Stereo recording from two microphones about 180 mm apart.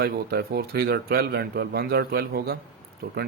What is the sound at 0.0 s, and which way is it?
Speech, 60° right (ahead or behind).